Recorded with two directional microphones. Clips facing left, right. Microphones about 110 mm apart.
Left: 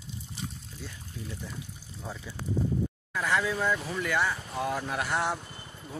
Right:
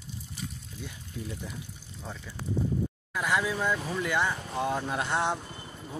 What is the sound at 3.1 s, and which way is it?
Speech, 15° right (ahead or behind).